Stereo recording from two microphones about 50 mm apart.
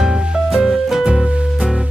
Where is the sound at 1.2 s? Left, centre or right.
Right.